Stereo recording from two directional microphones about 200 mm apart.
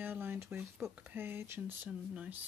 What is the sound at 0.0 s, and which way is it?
Speech, 10° right (ahead or behind).